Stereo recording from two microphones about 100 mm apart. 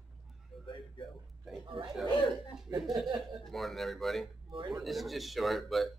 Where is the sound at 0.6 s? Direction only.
50° left (ahead or behind).